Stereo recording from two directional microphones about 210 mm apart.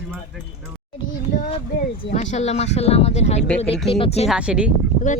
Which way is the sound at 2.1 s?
35° left (ahead or behind).